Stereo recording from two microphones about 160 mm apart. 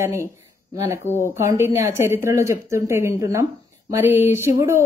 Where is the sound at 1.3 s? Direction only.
15° right (ahead or behind).